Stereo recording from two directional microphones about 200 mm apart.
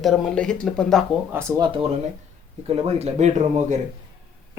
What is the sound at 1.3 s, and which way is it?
Speech, 15° right (ahead or behind).